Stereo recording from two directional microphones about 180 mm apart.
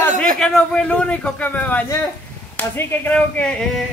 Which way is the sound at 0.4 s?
5° left (ahead or behind).